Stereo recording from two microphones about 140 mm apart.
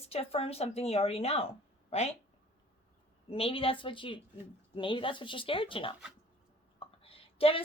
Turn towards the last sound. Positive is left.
turn(degrees=45)  # may be behind; listen again after turning